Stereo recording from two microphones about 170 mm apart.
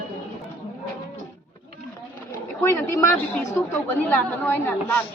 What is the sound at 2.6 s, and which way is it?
A woman's voice, 15° left (ahead or behind).